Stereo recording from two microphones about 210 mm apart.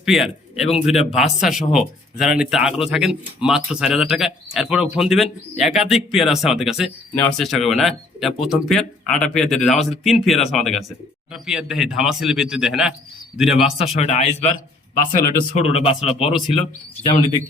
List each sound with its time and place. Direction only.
0.0 s a man's voice: centre (ahead or behind)
13.9 s speech: 30° left (ahead or behind)
15.5 s speech: 30° left (ahead or behind)